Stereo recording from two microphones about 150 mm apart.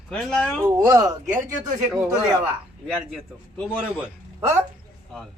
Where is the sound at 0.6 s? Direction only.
20° right (ahead or behind).